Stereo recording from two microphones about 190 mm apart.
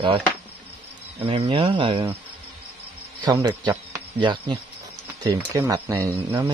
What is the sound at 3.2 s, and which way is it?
Speech, 20° right (ahead or behind).